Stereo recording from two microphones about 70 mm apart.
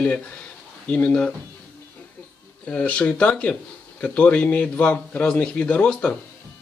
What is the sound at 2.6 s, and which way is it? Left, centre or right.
A man's voice, centre.